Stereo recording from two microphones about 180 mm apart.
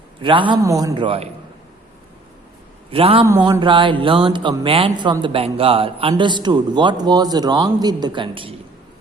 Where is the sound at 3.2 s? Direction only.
15° right (ahead or behind).